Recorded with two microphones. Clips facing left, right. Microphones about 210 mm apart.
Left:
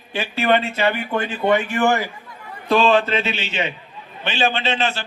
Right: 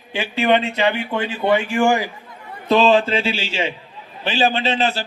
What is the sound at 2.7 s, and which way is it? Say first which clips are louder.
A man's voice: right 2 dB; 25° right (ahead or behind).